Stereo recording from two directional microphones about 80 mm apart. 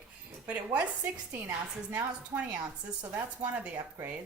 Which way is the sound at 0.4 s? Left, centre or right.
Centre.